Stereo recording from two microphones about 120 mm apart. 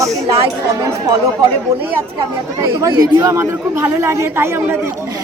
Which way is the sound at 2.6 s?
25° right (ahead or behind).